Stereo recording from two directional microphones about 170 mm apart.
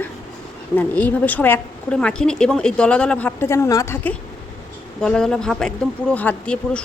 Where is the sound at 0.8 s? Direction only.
10° left (ahead or behind).